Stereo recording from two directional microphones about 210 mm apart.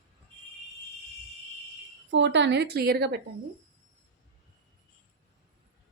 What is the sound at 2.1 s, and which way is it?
A woman's voice, 60° right (ahead or behind).